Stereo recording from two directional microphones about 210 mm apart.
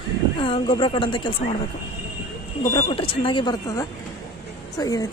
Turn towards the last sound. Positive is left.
turn(degrees=15)  # may be behind; listen again after turning